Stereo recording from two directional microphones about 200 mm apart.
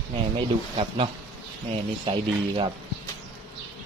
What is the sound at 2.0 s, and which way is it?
Speech, 25° right (ahead or behind).